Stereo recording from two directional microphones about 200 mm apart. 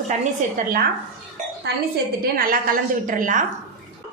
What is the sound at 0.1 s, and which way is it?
Speech, 40° right (ahead or behind).